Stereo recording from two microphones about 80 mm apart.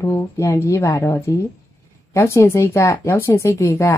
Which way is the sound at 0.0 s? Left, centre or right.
Left.